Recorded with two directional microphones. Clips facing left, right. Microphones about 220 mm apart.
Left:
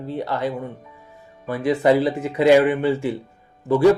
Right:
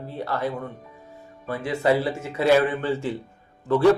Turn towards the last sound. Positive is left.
turn(degrees=10)  # may be behind; listen again after turning